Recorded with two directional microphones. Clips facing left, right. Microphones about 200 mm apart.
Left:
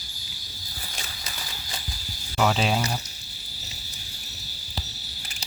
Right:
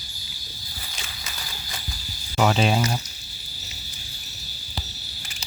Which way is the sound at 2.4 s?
5° right (ahead or behind).